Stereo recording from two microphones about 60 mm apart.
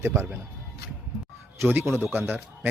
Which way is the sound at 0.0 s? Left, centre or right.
Right.